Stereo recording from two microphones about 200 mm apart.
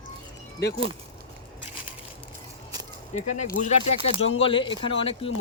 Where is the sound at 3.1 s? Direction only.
35° left (ahead or behind).